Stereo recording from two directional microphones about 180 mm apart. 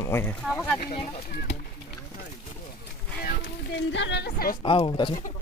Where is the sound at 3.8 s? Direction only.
80° left; by 4.5 s 60° left (ahead or behind).